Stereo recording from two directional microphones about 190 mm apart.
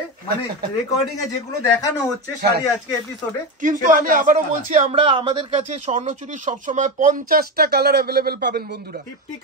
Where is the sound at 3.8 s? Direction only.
45° right (ahead or behind).